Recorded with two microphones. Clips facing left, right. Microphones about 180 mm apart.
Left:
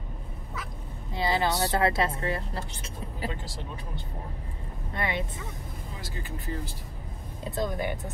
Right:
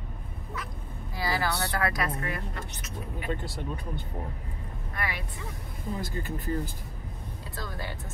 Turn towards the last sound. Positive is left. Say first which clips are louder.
# left 8 dB
turn(degrees=20)  # may be behind; listen again after turning